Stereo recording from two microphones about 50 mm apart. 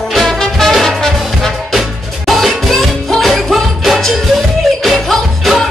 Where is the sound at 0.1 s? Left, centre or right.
Centre.